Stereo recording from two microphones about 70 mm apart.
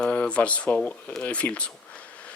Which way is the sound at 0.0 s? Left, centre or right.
Centre.